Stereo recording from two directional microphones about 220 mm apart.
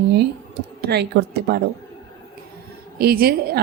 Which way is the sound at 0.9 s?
50° right (ahead or behind).